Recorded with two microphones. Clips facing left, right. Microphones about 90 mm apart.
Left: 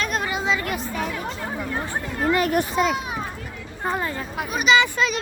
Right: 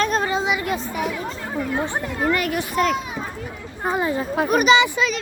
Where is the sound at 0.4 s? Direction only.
20° right (ahead or behind).